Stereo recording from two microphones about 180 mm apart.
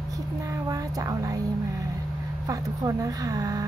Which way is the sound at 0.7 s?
20° right (ahead or behind).